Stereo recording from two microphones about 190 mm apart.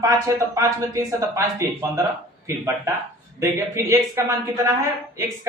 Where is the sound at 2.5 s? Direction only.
15° right (ahead or behind).